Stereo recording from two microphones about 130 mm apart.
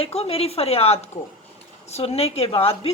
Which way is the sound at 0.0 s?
50° left (ahead or behind).